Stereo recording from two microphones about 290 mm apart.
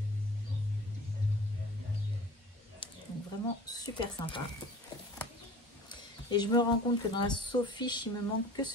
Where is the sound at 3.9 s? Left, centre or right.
Centre.